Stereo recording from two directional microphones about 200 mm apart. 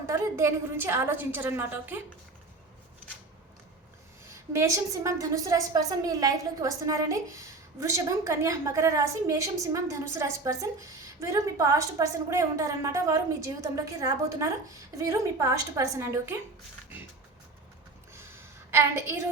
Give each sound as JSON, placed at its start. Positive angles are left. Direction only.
{"t": 0.1, "sound": "a woman's voice", "side_deg": -15}
{"t": 4.3, "sound": "a woman's voice", "side_deg": -15}
{"t": 18.1, "sound": "a sound", "side_deg": -15}